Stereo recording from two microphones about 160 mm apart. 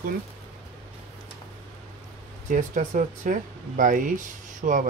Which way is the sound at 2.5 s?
55° right (ahead or behind).